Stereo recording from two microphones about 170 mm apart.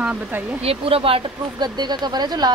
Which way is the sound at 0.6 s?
35° right (ahead or behind).